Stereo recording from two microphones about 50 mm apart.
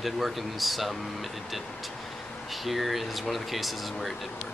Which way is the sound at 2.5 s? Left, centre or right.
Centre.